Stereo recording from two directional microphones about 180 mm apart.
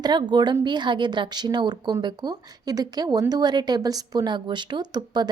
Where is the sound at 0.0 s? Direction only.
25° right (ahead or behind).